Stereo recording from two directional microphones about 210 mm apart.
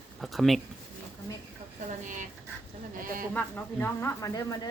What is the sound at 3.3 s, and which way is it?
Speech, 10° left (ahead or behind).